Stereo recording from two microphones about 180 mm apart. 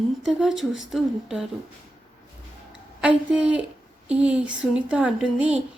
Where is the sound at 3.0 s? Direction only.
5° right (ahead or behind).